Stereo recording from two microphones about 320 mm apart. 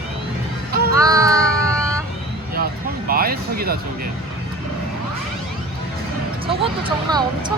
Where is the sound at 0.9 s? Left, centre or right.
Centre.